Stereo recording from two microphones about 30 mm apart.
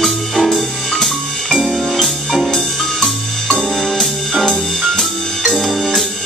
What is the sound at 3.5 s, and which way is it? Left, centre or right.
Music, centre.